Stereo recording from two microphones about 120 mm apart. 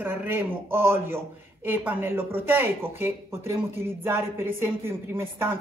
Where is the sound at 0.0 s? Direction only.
15° right (ahead or behind).